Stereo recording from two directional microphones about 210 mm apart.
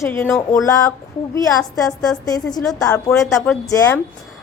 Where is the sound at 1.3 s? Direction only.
15° left (ahead or behind).